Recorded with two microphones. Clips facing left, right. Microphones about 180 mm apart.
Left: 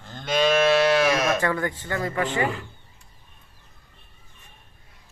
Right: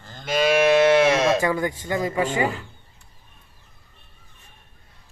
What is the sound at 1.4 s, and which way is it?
Speech, 10° right (ahead or behind).